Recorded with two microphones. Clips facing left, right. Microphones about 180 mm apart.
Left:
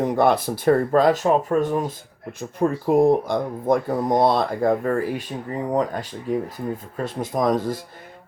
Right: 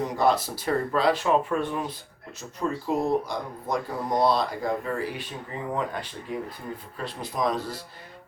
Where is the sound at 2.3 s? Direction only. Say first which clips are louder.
Left 7 dB; 55° left (ahead or behind).